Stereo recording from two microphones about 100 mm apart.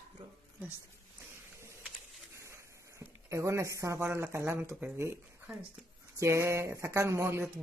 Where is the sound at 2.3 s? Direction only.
30° right (ahead or behind).